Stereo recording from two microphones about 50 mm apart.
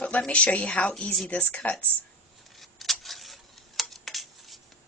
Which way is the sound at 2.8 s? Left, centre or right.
Centre.